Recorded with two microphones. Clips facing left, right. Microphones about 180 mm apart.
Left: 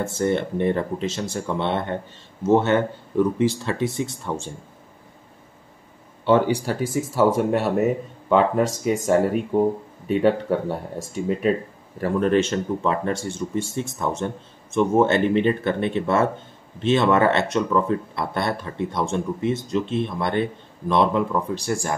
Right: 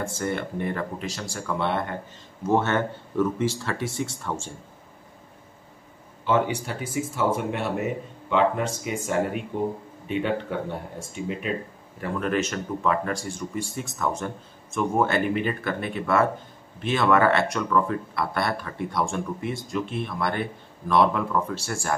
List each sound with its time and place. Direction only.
0.0 s speech: 25° left (ahead or behind)
6.2 s speech: 35° left (ahead or behind); by 21.9 s 15° left (ahead or behind)